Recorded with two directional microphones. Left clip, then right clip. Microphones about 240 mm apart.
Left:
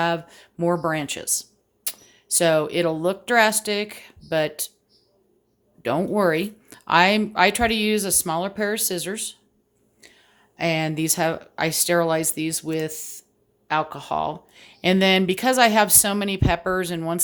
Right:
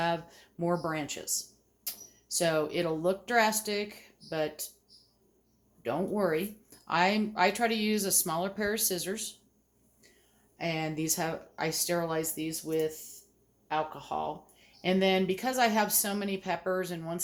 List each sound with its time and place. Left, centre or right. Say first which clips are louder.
0.0 s speech: left 8 dB; left
5.8 s speech: left 9 dB; left
10.0 s a sound: left 12 dB; left
10.6 s speech: left 10 dB; left